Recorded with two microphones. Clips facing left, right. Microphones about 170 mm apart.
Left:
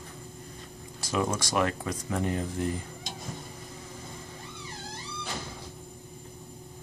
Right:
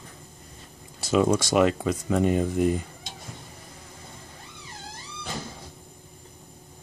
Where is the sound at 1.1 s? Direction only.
85° right.